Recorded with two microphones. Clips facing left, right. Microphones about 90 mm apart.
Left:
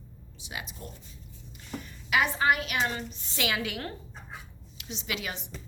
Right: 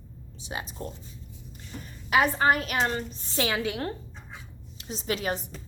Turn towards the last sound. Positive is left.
turn(degrees=-40)  # may be behind; listen again after turning